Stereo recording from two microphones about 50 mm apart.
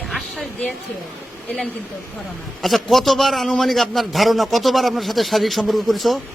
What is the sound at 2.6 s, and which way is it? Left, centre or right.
A man's voice, centre.